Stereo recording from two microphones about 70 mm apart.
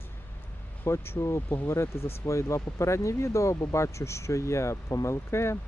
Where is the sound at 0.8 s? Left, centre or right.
Left.